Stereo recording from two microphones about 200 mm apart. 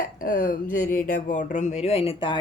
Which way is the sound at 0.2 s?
45° left (ahead or behind).